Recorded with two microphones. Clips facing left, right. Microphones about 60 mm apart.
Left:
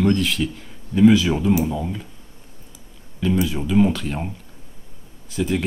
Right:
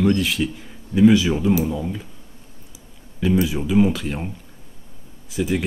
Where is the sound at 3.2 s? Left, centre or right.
Centre.